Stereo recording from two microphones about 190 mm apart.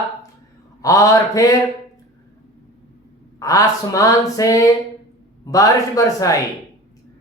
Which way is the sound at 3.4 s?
20° left (ahead or behind).